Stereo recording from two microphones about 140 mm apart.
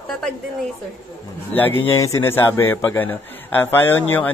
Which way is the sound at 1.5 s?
15° left (ahead or behind).